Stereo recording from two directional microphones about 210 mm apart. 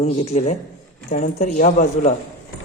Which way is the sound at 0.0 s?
30° left (ahead or behind).